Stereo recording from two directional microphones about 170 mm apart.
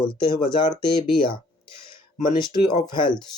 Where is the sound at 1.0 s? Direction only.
30° left (ahead or behind).